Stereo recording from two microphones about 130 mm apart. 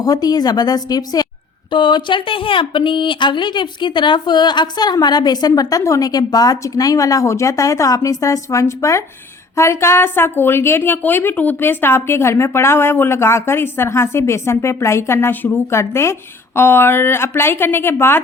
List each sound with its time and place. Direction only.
0.0 s a woman's voice: 30° left (ahead or behind)